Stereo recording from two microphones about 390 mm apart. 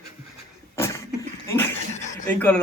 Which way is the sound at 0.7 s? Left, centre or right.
Centre.